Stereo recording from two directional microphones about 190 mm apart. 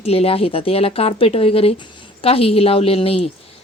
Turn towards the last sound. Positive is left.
turn(degrees=30)  # may be behind; listen again after turning